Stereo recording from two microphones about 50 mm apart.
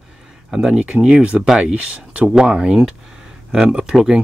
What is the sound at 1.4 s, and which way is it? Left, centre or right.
Speech, centre.